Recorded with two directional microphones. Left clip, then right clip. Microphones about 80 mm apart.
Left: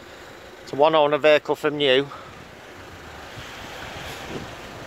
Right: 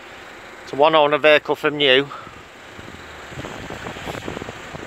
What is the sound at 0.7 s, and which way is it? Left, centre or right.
Speech, centre.